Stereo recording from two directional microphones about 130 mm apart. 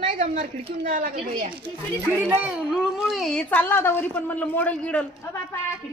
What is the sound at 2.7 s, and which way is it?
A woman's voice, centre (ahead or behind).